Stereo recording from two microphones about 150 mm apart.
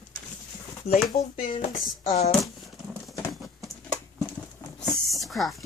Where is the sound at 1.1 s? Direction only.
35° left (ahead or behind).